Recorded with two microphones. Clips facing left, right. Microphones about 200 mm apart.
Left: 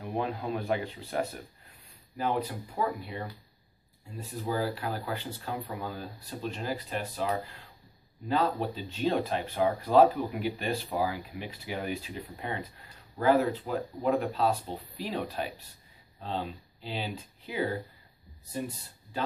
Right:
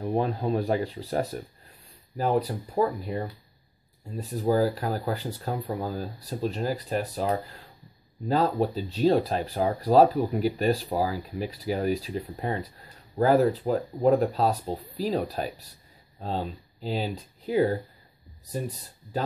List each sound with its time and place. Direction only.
0.0 s speech: 35° right (ahead or behind)
4.2 s speech: 40° right (ahead or behind)